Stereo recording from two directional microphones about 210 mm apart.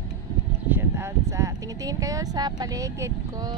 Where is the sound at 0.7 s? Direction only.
15° right (ahead or behind).